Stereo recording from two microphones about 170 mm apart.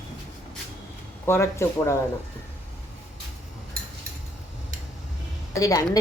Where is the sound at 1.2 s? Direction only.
15° left (ahead or behind).